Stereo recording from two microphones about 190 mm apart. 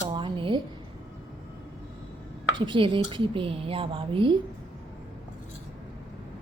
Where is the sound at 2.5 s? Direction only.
25° right (ahead or behind).